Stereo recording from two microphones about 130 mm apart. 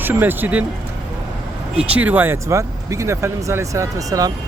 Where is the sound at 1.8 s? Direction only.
10° right (ahead or behind); by 4.3 s 25° right (ahead or behind).